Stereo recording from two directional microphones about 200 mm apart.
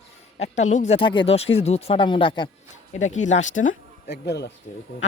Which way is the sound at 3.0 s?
35° left (ahead or behind).